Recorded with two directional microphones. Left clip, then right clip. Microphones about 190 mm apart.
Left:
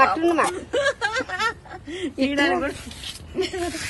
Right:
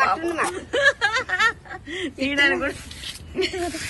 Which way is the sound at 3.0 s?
10° left (ahead or behind).